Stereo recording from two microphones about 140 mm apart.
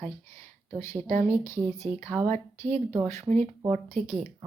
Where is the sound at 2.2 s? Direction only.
55° right (ahead or behind).